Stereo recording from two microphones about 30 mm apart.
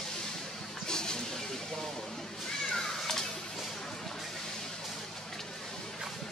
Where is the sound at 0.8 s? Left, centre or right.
Left.